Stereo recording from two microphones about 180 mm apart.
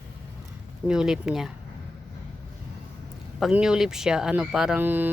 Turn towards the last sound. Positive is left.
turn(degrees=-10)  # may be behind; listen again after turning